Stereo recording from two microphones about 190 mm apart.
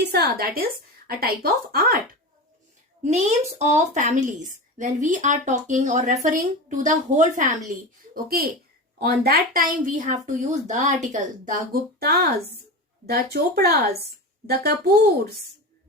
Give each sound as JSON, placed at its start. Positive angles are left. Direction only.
{"t": 0.1, "sound": "a child's voice", "side_deg": -55}
{"t": 3.0, "sound": "a woman's voice", "side_deg": -35}